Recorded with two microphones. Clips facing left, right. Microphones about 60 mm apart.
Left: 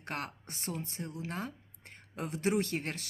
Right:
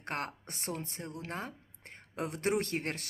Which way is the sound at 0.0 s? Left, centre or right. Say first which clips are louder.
Right 2 dB; right.